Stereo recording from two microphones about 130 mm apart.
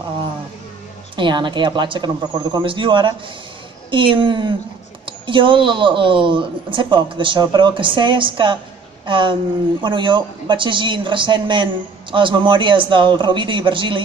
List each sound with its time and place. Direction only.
1.1 s speech: 40° right (ahead or behind)